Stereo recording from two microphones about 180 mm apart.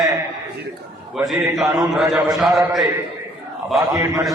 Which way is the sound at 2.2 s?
Centre (ahead or behind).